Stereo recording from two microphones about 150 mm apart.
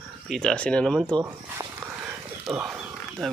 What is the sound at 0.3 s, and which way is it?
Speech, 5° left (ahead or behind).